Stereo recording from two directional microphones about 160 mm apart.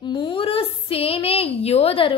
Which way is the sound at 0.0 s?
30° left (ahead or behind).